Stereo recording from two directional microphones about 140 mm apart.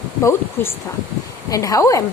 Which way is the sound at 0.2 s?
20° left (ahead or behind).